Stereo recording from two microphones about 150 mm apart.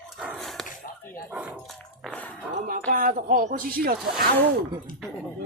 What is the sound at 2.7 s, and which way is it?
Speech, 75° right (ahead or behind).